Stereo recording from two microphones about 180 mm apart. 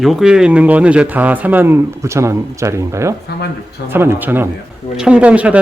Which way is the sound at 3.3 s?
65° left (ahead or behind).